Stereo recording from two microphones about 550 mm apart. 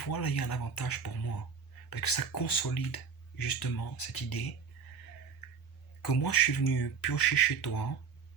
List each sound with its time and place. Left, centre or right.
0.0 s speech: left
6.1 s speech: left